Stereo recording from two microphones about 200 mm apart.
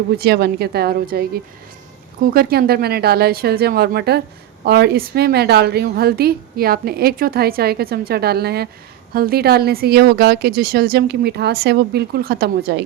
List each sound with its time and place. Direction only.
0.2 s a woman's voice: 55° right (ahead or behind)
2.2 s a woman's voice: 50° right (ahead or behind)